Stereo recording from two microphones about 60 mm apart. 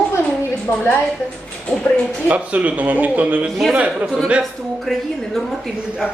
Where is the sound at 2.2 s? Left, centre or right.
Right.